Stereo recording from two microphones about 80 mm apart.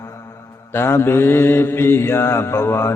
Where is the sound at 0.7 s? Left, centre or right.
Left.